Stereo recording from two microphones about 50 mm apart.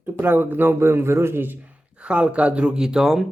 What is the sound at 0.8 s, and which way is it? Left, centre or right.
Speech, right.